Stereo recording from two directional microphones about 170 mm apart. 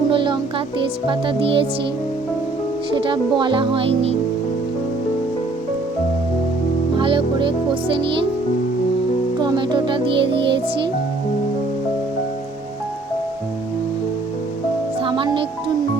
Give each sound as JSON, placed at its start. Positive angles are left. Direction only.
{"t": 0.1, "sound": "music", "side_deg": -30}
{"t": 3.0, "sound": "speech", "side_deg": -30}
{"t": 6.9, "sound": "music", "side_deg": -30}
{"t": 9.4, "sound": "music", "side_deg": -25}
{"t": 15.0, "sound": "music", "side_deg": -30}